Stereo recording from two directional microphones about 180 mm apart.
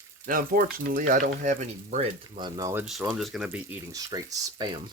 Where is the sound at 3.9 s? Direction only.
20° right (ahead or behind).